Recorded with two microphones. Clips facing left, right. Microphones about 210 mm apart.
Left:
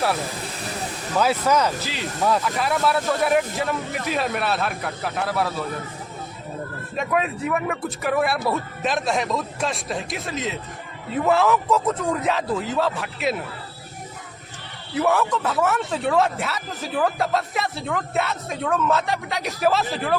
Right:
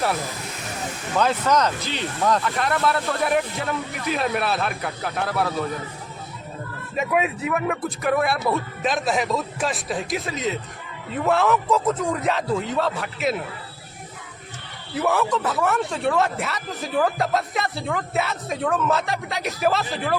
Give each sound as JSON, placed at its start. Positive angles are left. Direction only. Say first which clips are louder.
{"t": 1.2, "sound": "a man's voice", "louder": "even", "side_deg": 5}
{"t": 6.9, "sound": "a man's voice", "louder": "right 1 dB", "side_deg": -5}
{"t": 14.9, "sound": "a man's voice", "louder": "left 1 dB", "side_deg": 0}